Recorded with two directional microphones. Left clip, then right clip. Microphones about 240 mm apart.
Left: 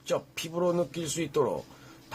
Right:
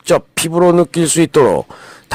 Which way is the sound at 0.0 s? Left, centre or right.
Right.